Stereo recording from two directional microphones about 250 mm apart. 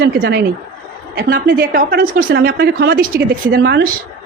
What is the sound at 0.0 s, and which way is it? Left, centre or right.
A woman's voice, right.